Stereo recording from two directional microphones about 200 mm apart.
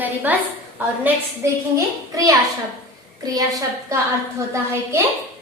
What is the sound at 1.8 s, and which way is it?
A woman's voice, 15° right (ahead or behind).